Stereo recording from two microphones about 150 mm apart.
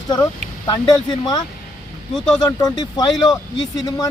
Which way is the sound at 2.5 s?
25° left (ahead or behind).